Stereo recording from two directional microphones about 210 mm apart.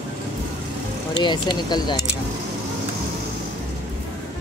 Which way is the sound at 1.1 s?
20° left (ahead or behind).